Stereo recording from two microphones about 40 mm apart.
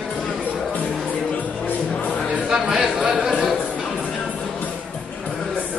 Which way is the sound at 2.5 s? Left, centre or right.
Centre.